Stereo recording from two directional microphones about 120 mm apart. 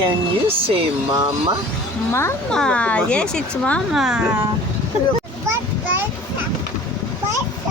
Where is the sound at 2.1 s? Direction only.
20° left (ahead or behind).